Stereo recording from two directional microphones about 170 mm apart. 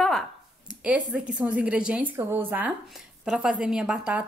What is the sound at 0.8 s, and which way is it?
A woman's voice, 5° right (ahead or behind).